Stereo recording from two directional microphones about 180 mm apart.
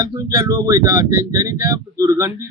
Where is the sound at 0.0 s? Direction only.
20° right (ahead or behind).